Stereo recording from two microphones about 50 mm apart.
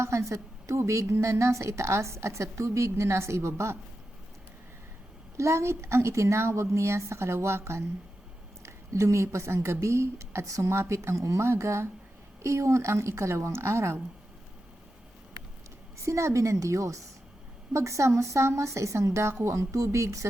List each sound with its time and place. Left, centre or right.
0.0 s a woman's voice: right
5.4 s a woman's voice: right
8.6 s a woman's voice: right
12.4 s a woman's voice: right
16.0 s a woman's voice: right